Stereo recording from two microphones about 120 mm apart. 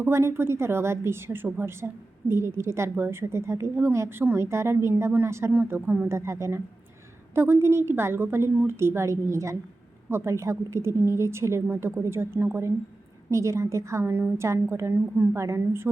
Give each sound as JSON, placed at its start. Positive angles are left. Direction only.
{"t": 0.0, "sound": "a woman's voice", "side_deg": -20}